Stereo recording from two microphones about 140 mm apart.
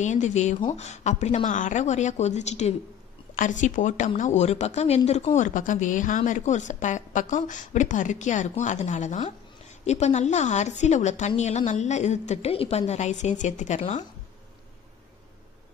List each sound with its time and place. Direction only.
0.0 s speech: 60° left (ahead or behind)